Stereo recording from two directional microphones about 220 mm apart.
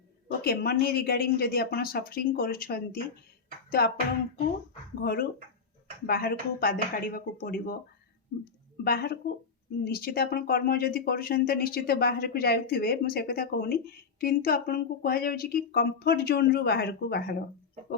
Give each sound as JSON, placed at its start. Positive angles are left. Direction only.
{"t": 0.4, "sound": "speech", "side_deg": 45}
{"t": 3.7, "sound": "a sound", "side_deg": 45}
{"t": 5.0, "sound": "speech", "side_deg": 45}
{"t": 8.8, "sound": "speech", "side_deg": 45}